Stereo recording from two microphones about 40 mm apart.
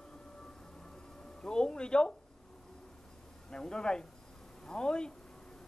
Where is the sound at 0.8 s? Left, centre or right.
Centre.